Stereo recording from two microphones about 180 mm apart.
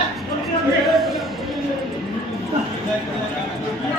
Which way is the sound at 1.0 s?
Centre (ahead or behind).